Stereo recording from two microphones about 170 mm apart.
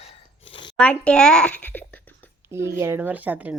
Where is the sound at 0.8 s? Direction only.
5° left (ahead or behind).